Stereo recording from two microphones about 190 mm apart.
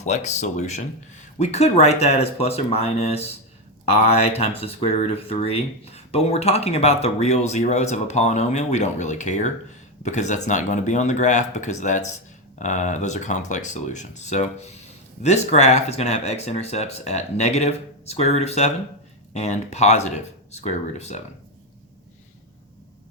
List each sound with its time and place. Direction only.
0.0 s speech: 35° left (ahead or behind)